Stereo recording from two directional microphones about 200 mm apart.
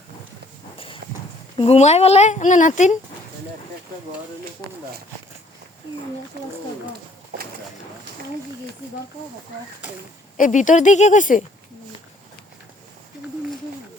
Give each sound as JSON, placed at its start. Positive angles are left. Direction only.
{"t": 1.5, "sound": "speech", "side_deg": 30}
{"t": 10.3, "sound": "speech", "side_deg": 40}